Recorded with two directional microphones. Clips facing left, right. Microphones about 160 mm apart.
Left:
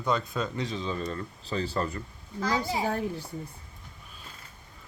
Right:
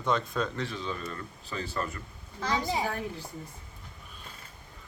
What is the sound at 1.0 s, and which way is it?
Speech, 30° left (ahead or behind).